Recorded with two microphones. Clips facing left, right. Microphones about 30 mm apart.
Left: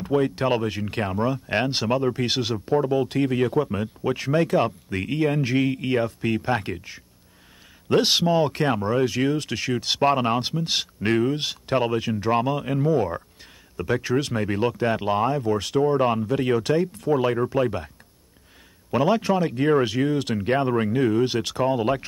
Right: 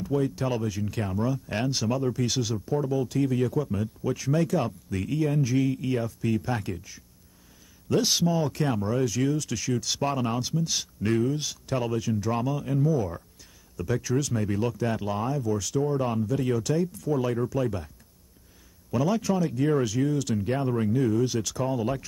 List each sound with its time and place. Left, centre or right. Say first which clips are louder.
0.0 s speech: left 5 dB; left